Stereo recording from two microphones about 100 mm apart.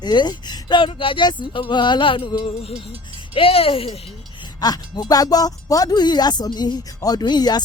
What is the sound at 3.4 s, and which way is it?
Speech, 70° left (ahead or behind).